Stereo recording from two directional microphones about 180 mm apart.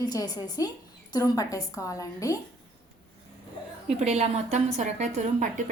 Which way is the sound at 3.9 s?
35° right (ahead or behind).